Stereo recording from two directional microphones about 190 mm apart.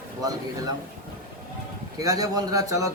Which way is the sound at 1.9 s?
20° right (ahead or behind).